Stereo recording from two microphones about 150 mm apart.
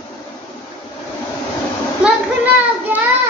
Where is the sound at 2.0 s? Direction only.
10° right (ahead or behind).